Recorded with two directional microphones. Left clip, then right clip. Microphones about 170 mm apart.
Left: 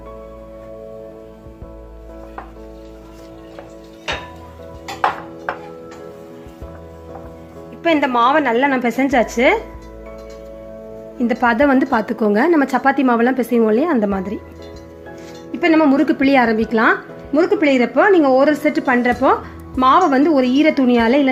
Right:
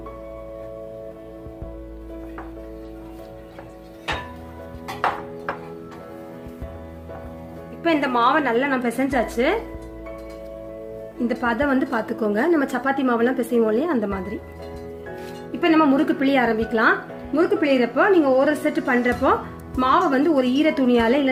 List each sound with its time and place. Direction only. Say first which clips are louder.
7.8 s a woman's voice: left 5 dB; 40° left (ahead or behind)
11.3 s speech: left 7 dB; 45° left (ahead or behind)
15.6 s a woman's voice: left 4 dB; 40° left (ahead or behind)